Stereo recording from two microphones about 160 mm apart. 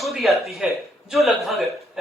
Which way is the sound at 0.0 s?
Centre (ahead or behind).